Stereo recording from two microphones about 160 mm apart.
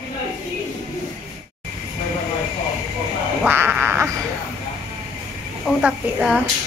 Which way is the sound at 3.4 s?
10° right (ahead or behind).